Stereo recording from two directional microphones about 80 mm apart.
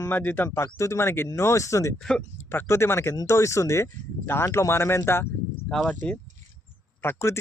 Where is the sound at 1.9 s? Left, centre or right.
Centre.